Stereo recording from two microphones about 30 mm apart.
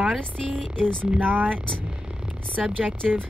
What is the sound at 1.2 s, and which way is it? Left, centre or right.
Speech, right.